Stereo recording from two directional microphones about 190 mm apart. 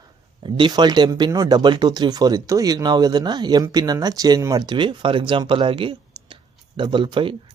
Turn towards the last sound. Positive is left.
turn(degrees=-25)  # may be behind; listen again after turning